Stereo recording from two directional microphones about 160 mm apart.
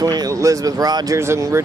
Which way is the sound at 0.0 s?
25° right (ahead or behind).